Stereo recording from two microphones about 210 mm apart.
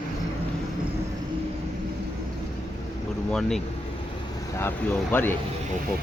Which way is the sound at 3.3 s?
5° left (ahead or behind).